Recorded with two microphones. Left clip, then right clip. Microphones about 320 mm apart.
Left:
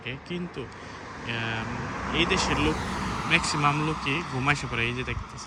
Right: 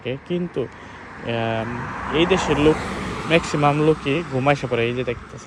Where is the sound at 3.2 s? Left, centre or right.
Centre.